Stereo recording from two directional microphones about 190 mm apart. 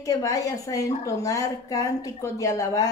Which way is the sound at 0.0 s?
20° left (ahead or behind).